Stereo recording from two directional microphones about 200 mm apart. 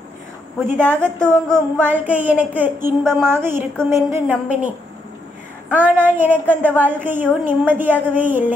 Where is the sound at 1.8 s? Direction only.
10° right (ahead or behind).